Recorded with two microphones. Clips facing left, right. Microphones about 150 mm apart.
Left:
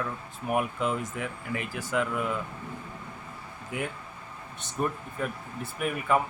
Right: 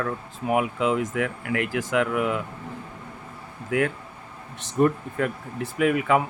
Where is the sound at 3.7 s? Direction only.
90° right.